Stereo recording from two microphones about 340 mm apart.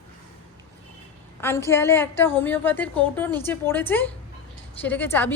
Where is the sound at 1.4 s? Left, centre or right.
Centre.